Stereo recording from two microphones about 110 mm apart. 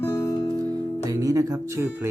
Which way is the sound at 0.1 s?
30° left (ahead or behind).